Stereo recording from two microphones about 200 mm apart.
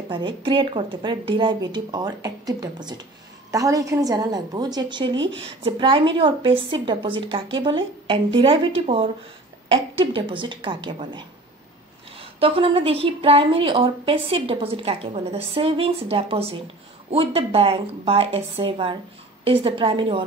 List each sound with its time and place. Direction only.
0.1 s a woman's voice: 25° right (ahead or behind)
5.1 s speech: 70° right (ahead or behind)
5.6 s a woman's voice: 25° right (ahead or behind)